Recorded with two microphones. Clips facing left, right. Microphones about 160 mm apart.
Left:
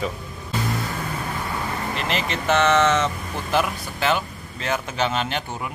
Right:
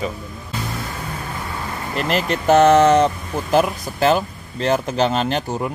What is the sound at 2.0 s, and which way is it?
Speech, 45° right (ahead or behind).